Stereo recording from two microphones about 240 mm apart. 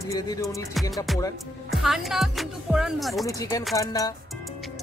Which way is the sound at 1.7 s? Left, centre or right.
Centre.